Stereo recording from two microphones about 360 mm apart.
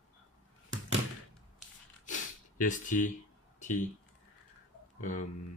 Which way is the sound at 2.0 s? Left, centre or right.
Left.